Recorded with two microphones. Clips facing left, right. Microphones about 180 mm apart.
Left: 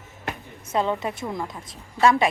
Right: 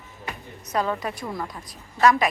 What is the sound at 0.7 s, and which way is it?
A woman's voice, 25° left (ahead or behind).